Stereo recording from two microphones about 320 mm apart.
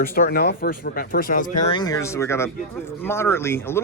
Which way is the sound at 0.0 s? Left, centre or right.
Left.